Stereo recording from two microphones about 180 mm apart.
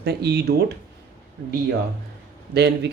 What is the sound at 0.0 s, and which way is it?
Speech, 65° right (ahead or behind).